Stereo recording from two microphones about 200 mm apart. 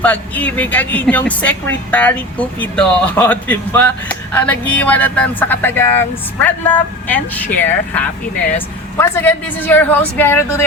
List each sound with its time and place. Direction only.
0.0 s a woman's voice: 10° left (ahead or behind)